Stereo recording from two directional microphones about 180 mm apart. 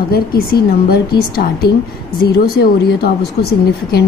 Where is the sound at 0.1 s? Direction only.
55° left (ahead or behind).